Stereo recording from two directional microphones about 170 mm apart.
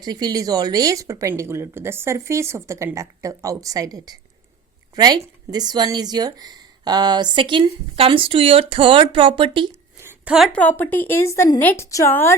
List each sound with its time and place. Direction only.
0.0 s a woman's voice: 25° right (ahead or behind)
10.0 s a sound: 15° right (ahead or behind)
10.3 s a woman's voice: 5° left (ahead or behind)